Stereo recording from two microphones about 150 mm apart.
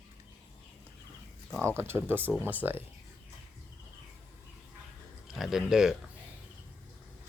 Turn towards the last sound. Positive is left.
turn(degrees=-5)  # may be behind; listen again after turning